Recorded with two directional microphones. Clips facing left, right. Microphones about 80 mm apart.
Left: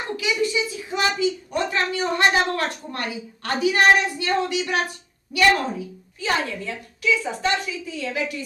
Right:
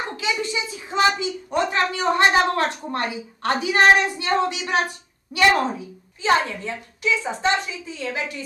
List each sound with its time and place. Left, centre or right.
0.2 s a woman's voice: right